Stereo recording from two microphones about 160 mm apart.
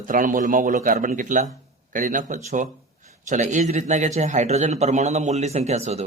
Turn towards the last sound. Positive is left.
turn(degrees=-40)  # may be behind; listen again after turning